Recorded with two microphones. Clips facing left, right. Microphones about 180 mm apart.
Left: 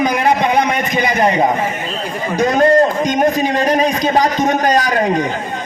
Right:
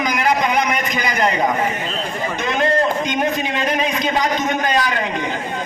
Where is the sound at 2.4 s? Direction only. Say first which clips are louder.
Left 8 dB; 45° left (ahead or behind).